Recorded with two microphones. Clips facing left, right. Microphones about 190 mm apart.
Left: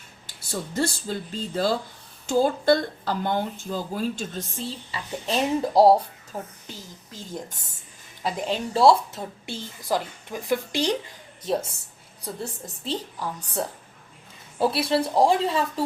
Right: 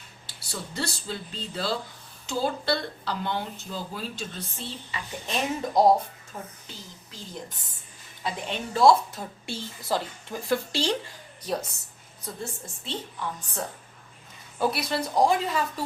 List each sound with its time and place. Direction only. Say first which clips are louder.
0.3 s a woman's voice: left 7 dB; 45° left (ahead or behind)
8.2 s a woman's voice: left 5 dB; 35° left (ahead or behind)
9.5 s a woman's voice: left 2 dB; 15° left (ahead or behind)
12.2 s a woman's voice: left 3 dB; 35° left (ahead or behind)
14.6 s a woman's voice: left 4 dB; 30° left (ahead or behind)